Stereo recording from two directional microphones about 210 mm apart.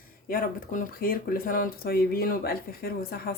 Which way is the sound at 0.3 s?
45° left (ahead or behind).